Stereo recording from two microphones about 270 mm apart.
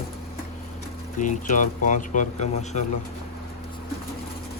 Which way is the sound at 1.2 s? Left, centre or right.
Left.